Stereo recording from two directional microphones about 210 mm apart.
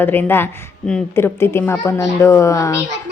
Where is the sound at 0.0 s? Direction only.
10° left (ahead or behind).